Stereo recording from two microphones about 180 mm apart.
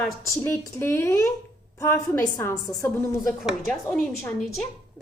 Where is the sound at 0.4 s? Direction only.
15° left (ahead or behind).